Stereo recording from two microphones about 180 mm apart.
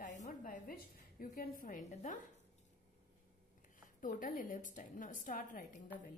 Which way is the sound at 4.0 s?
50° left (ahead or behind).